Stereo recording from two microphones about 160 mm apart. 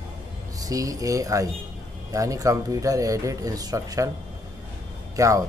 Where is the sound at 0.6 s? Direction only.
20° right (ahead or behind).